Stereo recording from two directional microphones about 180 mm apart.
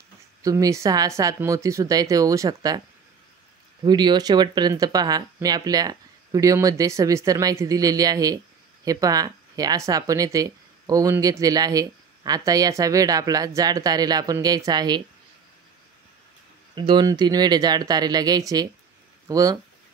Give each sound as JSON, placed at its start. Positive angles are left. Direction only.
{"t": 0.4, "sound": "speech", "side_deg": -20}
{"t": 3.8, "sound": "speech", "side_deg": -25}
{"t": 16.7, "sound": "speech", "side_deg": -25}